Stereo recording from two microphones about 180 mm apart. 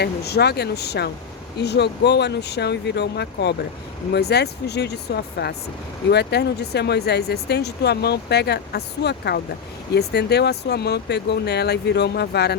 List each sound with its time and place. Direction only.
0.0 s speech: 65° left (ahead or behind)